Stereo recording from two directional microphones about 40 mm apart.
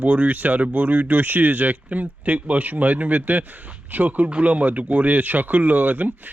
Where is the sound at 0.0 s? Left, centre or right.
Right.